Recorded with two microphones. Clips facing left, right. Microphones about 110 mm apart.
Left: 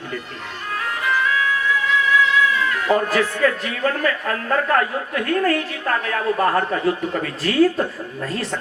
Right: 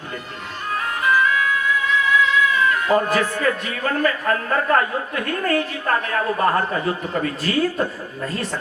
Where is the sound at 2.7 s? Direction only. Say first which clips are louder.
Right 1 dB; 30° right (ahead or behind).